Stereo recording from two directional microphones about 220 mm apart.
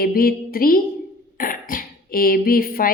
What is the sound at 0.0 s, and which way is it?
A woman's voice, 40° left (ahead or behind).